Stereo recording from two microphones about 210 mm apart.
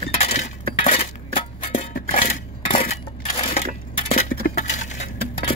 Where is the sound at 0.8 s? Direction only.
35° left (ahead or behind).